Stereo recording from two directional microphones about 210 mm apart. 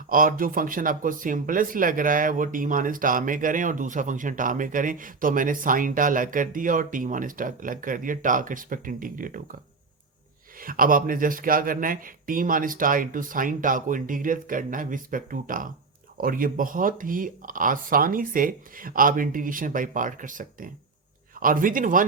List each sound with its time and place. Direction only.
0.1 s speech: 40° right (ahead or behind)
10.6 s speech: 40° right (ahead or behind)